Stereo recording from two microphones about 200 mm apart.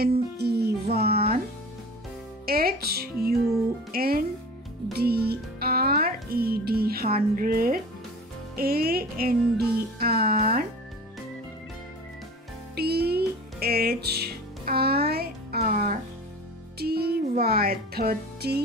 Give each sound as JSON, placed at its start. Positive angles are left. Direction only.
{"t": 0.0, "sound": "music", "side_deg": -50}
{"t": 2.4, "sound": "music", "side_deg": -50}
{"t": 3.9, "sound": "speech", "side_deg": -50}
{"t": 4.9, "sound": "music", "side_deg": -50}
{"t": 8.5, "sound": "speech", "side_deg": -50}
{"t": 9.8, "sound": "music", "side_deg": -50}
{"t": 12.7, "sound": "music", "side_deg": -50}